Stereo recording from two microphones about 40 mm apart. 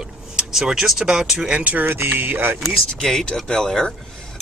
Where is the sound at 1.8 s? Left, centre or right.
Right.